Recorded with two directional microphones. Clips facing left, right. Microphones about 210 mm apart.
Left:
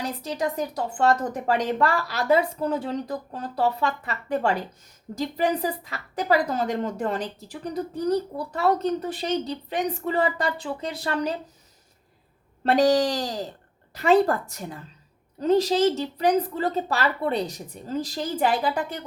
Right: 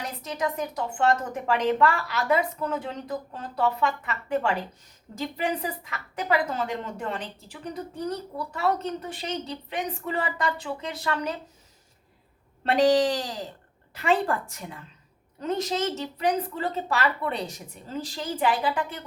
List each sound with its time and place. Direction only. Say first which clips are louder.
0.2 s a woman's voice: right 1 dB; 35° left (ahead or behind)
12.6 s a woman's voice: left 1 dB; 40° left (ahead or behind)